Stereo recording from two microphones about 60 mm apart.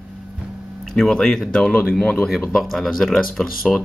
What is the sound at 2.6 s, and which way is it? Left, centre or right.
Speech, centre.